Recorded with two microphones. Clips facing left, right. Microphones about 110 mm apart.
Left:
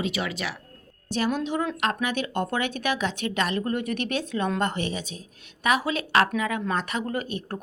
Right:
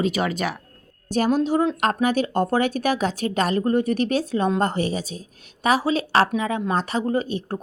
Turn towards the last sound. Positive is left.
turn(degrees=-30)  # may be behind; listen again after turning